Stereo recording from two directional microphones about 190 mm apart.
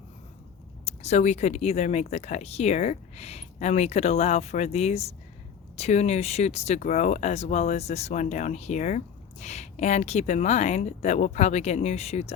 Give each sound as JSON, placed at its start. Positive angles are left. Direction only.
{"t": 0.9, "sound": "speech", "side_deg": 35}